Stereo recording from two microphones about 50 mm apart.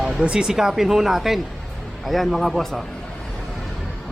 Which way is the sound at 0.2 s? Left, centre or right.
Centre.